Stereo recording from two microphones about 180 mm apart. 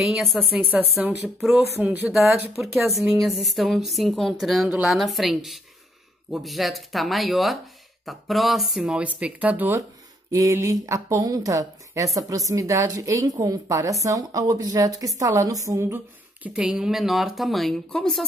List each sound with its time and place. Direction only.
0.0 s a woman's voice: centre (ahead or behind)
1.8 s a woman's voice: 5° right (ahead or behind)
16.4 s a woman's voice: 5° right (ahead or behind)